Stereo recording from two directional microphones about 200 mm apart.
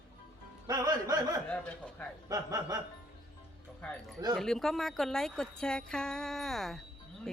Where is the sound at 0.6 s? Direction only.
20° right (ahead or behind).